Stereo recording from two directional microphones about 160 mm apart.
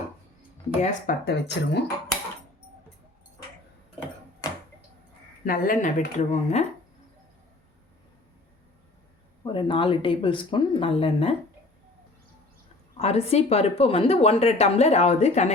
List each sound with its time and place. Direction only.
0.8 s speech: 50° left (ahead or behind)
1.2 s speech: 90° left
4.4 s a sound: 25° left (ahead or behind)
5.5 s speech: 60° left (ahead or behind)
6.1 s speech: 45° left (ahead or behind)
9.4 s a woman's voice: 30° left (ahead or behind)
13.0 s a woman's voice: 40° left (ahead or behind)